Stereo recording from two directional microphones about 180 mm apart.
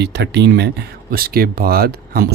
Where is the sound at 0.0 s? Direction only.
65° right (ahead or behind).